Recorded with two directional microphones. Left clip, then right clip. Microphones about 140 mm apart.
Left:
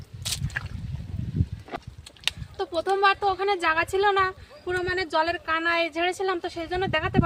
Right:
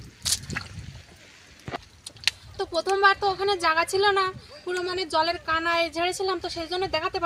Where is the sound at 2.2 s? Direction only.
Centre (ahead or behind).